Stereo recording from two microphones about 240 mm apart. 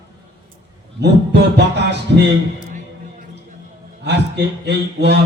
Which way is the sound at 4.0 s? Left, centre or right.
Right.